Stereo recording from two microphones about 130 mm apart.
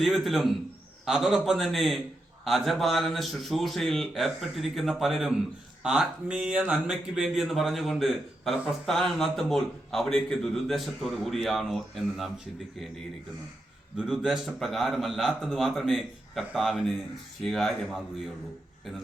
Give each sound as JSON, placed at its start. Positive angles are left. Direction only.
{"t": 0.0, "sound": "a man's voice", "side_deg": 0}
{"t": 13.9, "sound": "a man's voice", "side_deg": -5}